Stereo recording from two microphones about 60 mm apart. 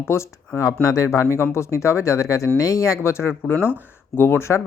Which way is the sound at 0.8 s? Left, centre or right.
Left.